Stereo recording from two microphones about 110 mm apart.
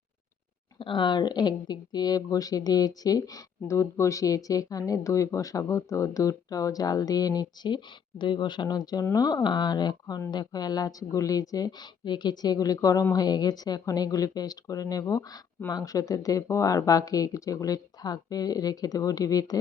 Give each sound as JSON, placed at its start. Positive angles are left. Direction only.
{"t": 0.8, "sound": "speech", "side_deg": 45}